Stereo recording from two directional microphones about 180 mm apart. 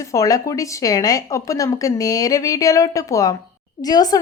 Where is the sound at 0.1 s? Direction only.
20° left (ahead or behind).